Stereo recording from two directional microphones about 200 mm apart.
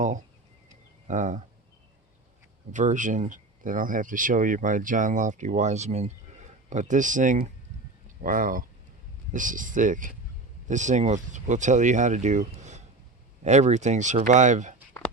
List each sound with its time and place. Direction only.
1.0 s speech: 40° right (ahead or behind)
2.7 s speech: 40° right (ahead or behind)